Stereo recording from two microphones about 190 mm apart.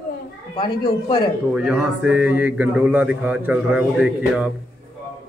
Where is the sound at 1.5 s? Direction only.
5° right (ahead or behind).